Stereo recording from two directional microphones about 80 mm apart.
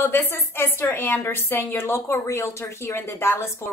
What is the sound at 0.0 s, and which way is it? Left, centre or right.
A woman's voice, left.